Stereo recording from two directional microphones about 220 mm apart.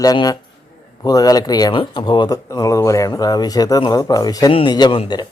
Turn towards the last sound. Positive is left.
turn(degrees=20)  # may be behind; listen again after turning